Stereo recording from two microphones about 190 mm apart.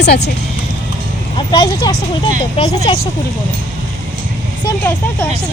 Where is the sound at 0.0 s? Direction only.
60° left (ahead or behind).